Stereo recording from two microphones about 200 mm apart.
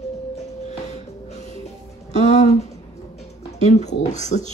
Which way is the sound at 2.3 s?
35° left (ahead or behind).